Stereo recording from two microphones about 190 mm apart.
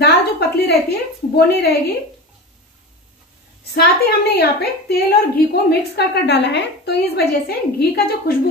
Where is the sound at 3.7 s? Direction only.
55° left (ahead or behind).